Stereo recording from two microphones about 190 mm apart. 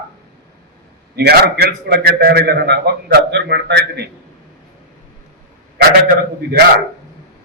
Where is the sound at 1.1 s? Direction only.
60° right (ahead or behind).